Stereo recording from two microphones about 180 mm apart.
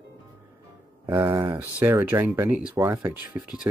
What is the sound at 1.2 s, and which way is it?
Speech, 20° right (ahead or behind).